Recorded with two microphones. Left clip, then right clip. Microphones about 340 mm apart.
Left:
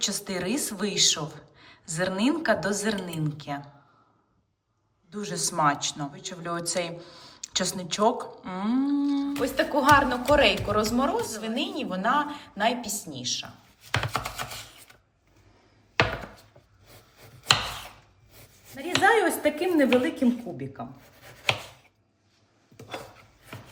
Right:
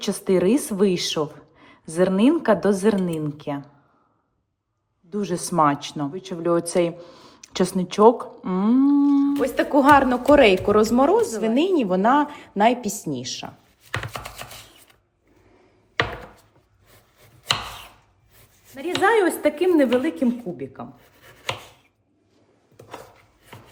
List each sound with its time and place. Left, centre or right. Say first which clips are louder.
0.0 s a woman's voice: right 9 dB; centre
5.1 s a woman's voice: right 7 dB; centre
13.9 s chopping: left 2 dB; centre
17.2 s chopping: left 1 dB; centre
18.8 s a woman's voice: right 3 dB; centre
21.0 s a sound: left 3 dB; centre